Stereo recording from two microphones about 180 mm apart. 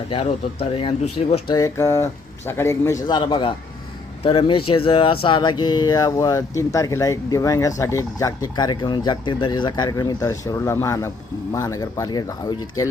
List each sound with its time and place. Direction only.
0.1 s speech: 30° left (ahead or behind)